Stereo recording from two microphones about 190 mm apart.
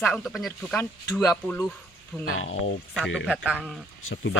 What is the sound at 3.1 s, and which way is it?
Speech, 5° right (ahead or behind).